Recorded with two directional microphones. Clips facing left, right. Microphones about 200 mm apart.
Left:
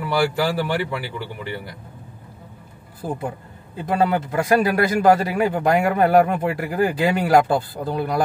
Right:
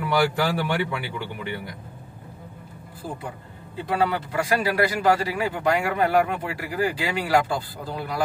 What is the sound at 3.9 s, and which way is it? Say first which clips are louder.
A man's voice: left 4 dB; 45° left (ahead or behind).